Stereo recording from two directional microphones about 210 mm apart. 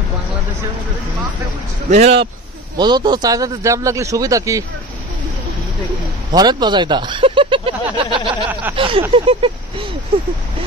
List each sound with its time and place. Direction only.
1.9 s speech: 30° right (ahead or behind)
2.8 s a man's voice: 20° right (ahead or behind)
6.3 s speech: 20° right (ahead or behind)